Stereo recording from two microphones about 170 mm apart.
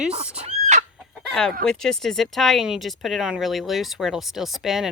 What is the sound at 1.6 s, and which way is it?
Speech, 5° left (ahead or behind).